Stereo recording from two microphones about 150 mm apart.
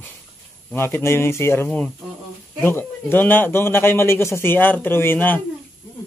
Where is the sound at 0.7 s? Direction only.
15° left (ahead or behind).